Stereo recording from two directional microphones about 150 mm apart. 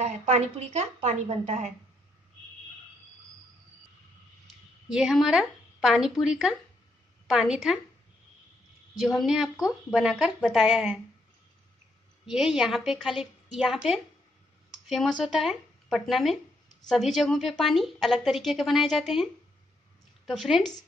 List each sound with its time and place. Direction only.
0.0 s speech: 50° right (ahead or behind)
4.8 s a woman's voice: 5° right (ahead or behind)
8.9 s a woman's voice: centre (ahead or behind)
12.3 s a woman's voice: 5° right (ahead or behind)
20.2 s a woman's voice: centre (ahead or behind)